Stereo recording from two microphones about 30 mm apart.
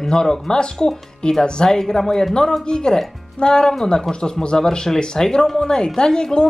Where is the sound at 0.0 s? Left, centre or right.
Centre.